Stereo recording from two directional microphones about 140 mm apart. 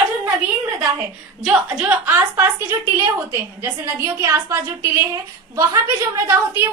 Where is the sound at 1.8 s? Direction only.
10° right (ahead or behind).